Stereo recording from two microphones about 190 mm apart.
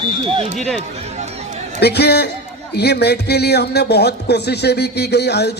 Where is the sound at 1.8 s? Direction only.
60° left (ahead or behind).